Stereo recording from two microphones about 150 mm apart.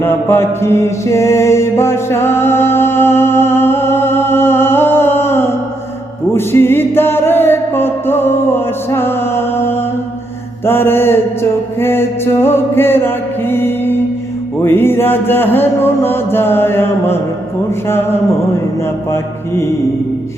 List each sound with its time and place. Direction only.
0.0 s mantra: 15° left (ahead or behind)
6.3 s music: 15° left (ahead or behind)
10.7 s mantra: 15° left (ahead or behind)
11.8 s music: 15° left (ahead or behind)
14.6 s mantra: 15° left (ahead or behind)